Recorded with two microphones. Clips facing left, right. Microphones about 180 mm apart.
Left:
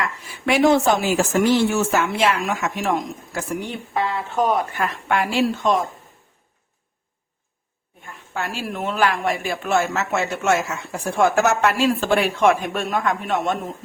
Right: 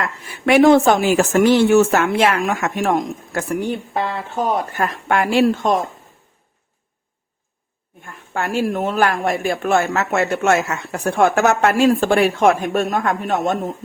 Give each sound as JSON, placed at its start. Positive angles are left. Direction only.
{"t": 0.0, "sound": "a woman's voice", "side_deg": -60}
{"t": 8.0, "sound": "a woman's voice", "side_deg": -50}